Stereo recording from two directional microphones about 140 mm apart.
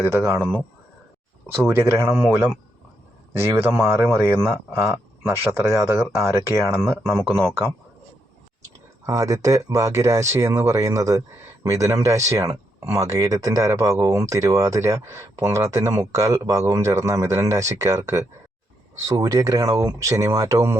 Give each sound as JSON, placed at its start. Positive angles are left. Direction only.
{"t": 0.0, "sound": "speech", "side_deg": -20}
{"t": 1.5, "sound": "speech", "side_deg": -20}
{"t": 3.3, "sound": "speech", "side_deg": -15}
{"t": 9.0, "sound": "speech", "side_deg": -25}